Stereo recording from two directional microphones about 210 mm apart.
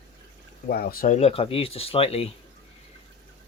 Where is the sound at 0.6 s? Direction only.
45° left (ahead or behind).